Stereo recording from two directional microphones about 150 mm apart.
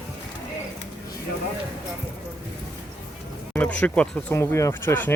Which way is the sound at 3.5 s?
10° left (ahead or behind).